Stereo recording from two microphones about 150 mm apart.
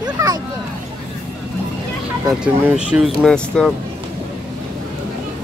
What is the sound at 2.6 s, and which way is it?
Speech, 10° right (ahead or behind).